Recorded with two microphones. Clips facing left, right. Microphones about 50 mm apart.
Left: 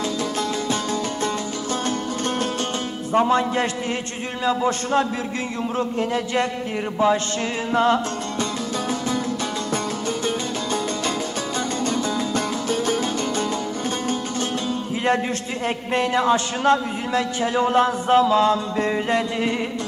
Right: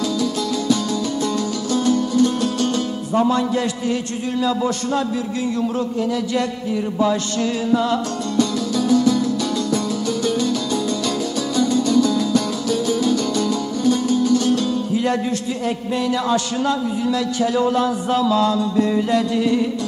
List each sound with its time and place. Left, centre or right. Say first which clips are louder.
0.2 s music: right 3 dB; left
4.4 s a man's voice: even; left
7.7 s music: left 3 dB; left
15.6 s a man's voice: left 2 dB; left